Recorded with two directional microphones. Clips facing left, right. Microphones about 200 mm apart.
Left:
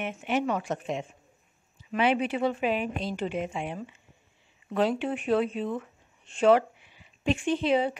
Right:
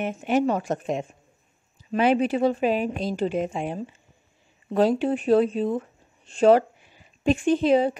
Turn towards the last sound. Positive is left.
turn(degrees=-40)  # may be behind; listen again after turning